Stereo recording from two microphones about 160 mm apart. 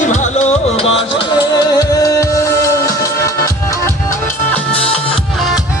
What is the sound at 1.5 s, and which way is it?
Music, 20° left (ahead or behind).